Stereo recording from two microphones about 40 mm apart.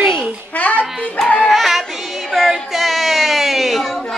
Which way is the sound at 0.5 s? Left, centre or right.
Left.